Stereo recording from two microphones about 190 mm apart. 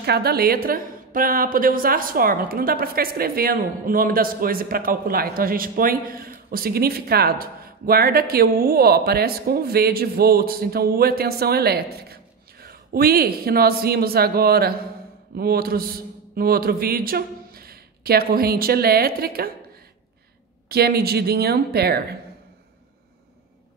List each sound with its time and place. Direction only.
0.0 s a woman's voice: 55° right (ahead or behind)
20.6 s a woman's voice: 55° right (ahead or behind)